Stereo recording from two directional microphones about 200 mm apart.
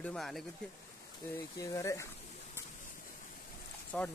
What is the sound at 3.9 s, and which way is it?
Speech, 5° left (ahead or behind).